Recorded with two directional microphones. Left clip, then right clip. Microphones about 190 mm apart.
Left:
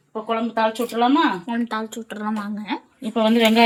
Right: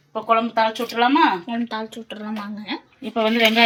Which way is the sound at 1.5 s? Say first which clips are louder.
Left 1 dB; 10° left (ahead or behind).